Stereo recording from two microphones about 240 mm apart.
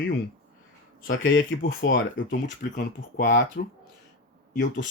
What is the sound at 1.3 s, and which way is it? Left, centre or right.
Speech, left.